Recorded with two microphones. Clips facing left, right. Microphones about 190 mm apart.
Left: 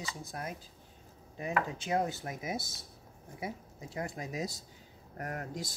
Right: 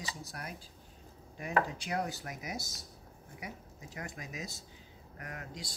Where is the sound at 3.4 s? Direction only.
30° left (ahead or behind).